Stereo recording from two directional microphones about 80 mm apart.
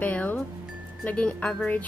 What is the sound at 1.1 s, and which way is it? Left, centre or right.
Speech, centre.